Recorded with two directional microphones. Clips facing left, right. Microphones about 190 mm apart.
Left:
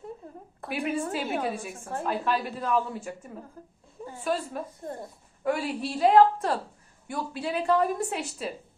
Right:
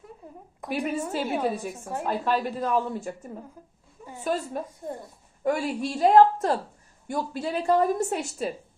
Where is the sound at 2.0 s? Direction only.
40° right (ahead or behind).